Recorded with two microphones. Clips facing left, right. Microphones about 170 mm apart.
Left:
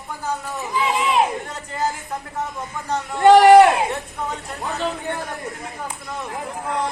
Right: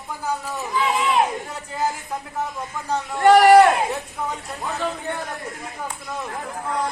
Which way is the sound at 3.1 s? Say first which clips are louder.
Left 2 dB; 20° left (ahead or behind).